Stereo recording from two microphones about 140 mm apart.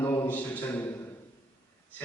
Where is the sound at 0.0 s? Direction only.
20° left (ahead or behind).